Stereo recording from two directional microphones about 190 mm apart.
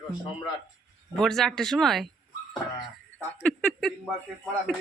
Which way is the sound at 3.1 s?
5° left (ahead or behind).